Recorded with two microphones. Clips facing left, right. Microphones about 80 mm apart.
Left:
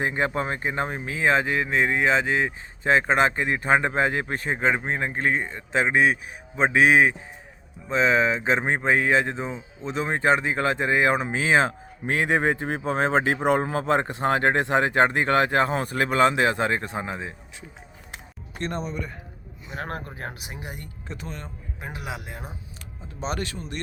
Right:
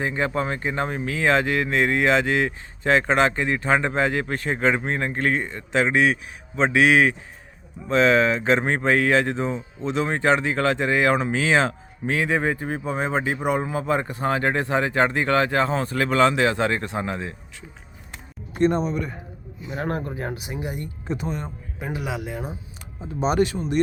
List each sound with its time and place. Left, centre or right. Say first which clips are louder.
0.0 s speech: right 1 dB; left
4.6 s speech: right 2 dB; centre; by 7.1 s left
7.9 s speech: right 3 dB; centre; by 9.1 s left
9.3 s speech: right 5 dB; centre
10.1 s speech: left 1 dB; left
11.3 s speech: right 1 dB; left
14.1 s speech: left 1 dB; left
18.5 s speech: right 9 dB; centre
20.5 s speech: right 7 dB; centre
21.1 s speech: right 8 dB; centre
23.0 s speech: right 9 dB; centre